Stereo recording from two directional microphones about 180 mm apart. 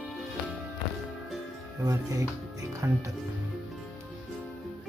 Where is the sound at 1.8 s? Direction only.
15° right (ahead or behind).